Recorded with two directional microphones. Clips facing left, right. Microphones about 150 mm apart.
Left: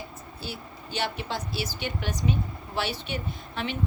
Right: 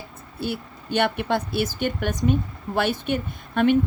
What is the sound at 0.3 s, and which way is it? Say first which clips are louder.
Speech: right 10 dB; 55° right (ahead or behind).